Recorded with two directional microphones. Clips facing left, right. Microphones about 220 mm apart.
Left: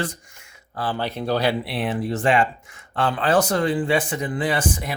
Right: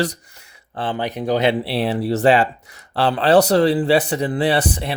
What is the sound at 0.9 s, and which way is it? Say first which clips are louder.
Speech: right 4 dB; 15° right (ahead or behind).